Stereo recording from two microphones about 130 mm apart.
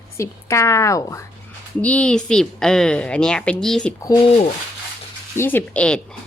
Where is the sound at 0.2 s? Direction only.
20° left (ahead or behind).